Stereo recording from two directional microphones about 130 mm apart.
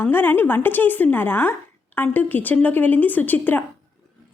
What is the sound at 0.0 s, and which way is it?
A woman's voice, 15° left (ahead or behind).